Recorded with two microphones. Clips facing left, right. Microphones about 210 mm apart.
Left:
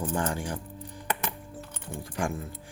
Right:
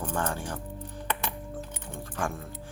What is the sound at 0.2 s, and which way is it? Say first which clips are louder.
Speech: left 1 dB; 15° left (ahead or behind).